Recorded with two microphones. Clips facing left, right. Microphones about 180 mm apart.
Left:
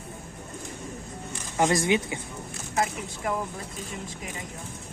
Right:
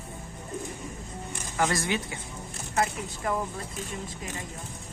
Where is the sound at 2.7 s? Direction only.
Centre (ahead or behind).